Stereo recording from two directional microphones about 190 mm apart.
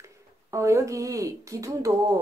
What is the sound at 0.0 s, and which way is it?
A woman's voice, 15° right (ahead or behind).